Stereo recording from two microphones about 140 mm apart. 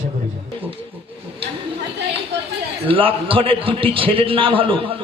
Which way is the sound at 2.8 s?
40° right (ahead or behind).